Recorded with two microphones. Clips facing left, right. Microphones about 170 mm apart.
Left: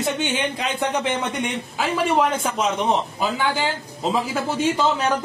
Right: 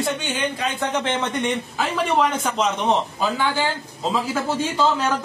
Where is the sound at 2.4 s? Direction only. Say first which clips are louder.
Right 1 dB; 10° left (ahead or behind).